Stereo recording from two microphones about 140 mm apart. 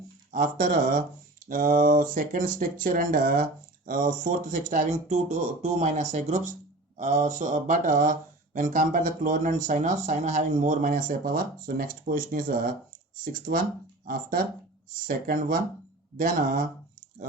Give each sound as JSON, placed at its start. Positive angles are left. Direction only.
{"t": 0.3, "sound": "speech", "side_deg": -75}
{"t": 16.1, "sound": "speech", "side_deg": -75}